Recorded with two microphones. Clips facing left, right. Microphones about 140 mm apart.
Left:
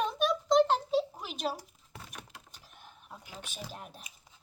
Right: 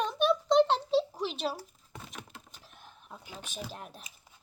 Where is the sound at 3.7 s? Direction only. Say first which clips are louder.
Right 1 dB; 5° left (ahead or behind).